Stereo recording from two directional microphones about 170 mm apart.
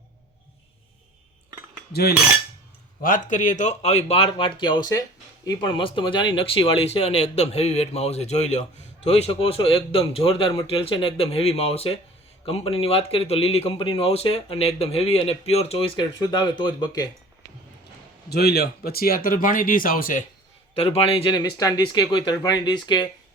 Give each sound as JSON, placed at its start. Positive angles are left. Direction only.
{"t": 1.9, "sound": "cutlery", "side_deg": 65}
{"t": 3.0, "sound": "speech", "side_deg": 50}
{"t": 18.3, "sound": "speech", "side_deg": 70}
{"t": 20.7, "sound": "speech", "side_deg": 35}